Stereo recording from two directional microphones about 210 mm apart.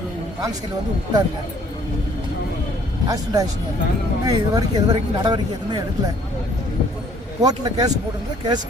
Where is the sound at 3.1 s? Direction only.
15° right (ahead or behind).